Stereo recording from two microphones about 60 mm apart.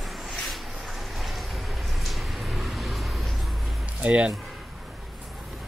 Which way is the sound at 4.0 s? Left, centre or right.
Right.